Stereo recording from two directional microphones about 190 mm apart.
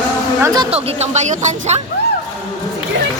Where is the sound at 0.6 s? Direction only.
30° right (ahead or behind).